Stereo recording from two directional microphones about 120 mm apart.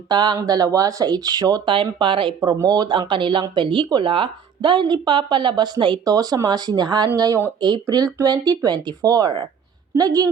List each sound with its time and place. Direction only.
0.1 s a woman's voice: 35° right (ahead or behind)
1.7 s a woman's voice: 45° right (ahead or behind)